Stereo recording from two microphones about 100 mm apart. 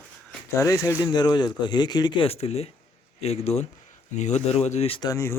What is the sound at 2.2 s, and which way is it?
Speech, 85° left.